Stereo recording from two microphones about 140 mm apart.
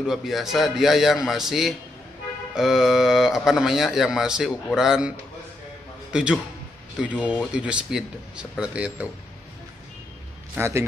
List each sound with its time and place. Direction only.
0.0 s speech: 5° right (ahead or behind)
6.1 s speech: 5° right (ahead or behind)
10.5 s a man's voice: 20° right (ahead or behind)